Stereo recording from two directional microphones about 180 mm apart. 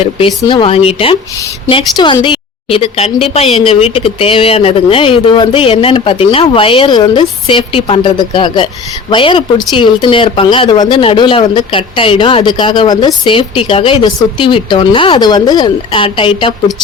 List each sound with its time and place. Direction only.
0.4 s speech: 30° left (ahead or behind)